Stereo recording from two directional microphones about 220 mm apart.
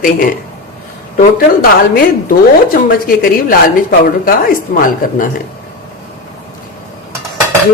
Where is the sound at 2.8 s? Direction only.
40° left (ahead or behind).